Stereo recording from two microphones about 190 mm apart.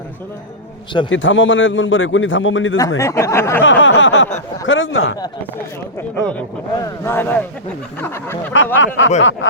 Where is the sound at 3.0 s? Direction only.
15° left (ahead or behind).